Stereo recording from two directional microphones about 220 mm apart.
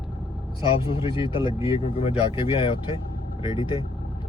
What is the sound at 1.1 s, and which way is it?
Speech, 25° left (ahead or behind).